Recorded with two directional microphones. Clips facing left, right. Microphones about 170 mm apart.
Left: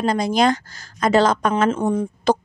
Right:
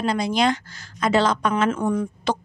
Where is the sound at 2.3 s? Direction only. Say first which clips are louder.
Left 7 dB; 40° left (ahead or behind).